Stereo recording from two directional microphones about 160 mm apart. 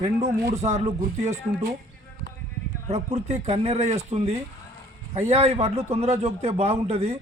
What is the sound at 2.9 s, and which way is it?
Speech, 45° right (ahead or behind).